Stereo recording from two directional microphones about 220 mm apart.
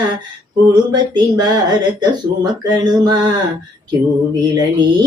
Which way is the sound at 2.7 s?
20° right (ahead or behind).